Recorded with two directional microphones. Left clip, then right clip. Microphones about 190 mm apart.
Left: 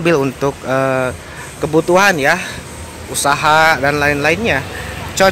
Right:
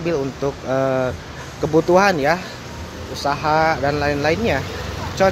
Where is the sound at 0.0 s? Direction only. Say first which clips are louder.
Left 7 dB; 15° left (ahead or behind).